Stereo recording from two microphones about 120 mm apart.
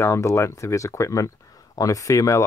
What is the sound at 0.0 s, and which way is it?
Speech, 25° left (ahead or behind).